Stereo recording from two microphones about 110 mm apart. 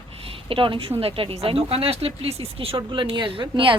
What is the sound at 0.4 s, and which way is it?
A woman's voice, 50° right (ahead or behind).